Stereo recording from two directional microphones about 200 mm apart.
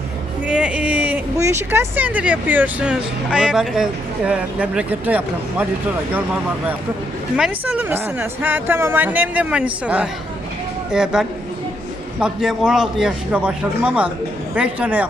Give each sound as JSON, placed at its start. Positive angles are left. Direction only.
{"t": 0.4, "sound": "a man's voice", "side_deg": -5}